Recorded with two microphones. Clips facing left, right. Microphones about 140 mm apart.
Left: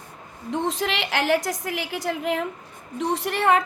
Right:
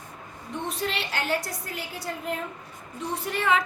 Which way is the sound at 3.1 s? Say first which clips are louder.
Left 4 dB; 80° left.